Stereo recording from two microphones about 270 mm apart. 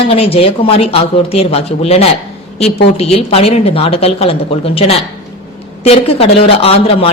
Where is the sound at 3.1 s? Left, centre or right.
Left.